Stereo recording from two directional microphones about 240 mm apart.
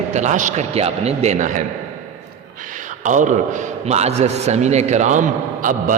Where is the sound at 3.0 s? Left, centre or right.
Right.